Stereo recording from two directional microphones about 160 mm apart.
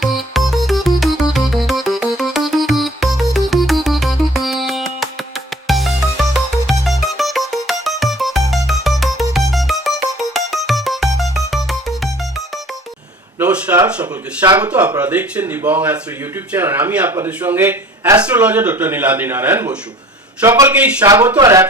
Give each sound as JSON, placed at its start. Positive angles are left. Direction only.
{"t": 0.0, "sound": "music", "side_deg": 0}
{"t": 13.4, "sound": "a sound", "side_deg": -10}
{"t": 14.6, "sound": "speech", "side_deg": -10}